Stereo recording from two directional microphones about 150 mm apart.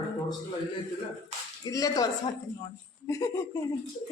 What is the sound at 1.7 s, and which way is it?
Speech, 25° left (ahead or behind).